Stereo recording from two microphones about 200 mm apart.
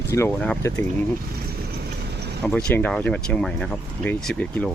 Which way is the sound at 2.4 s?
5° left (ahead or behind).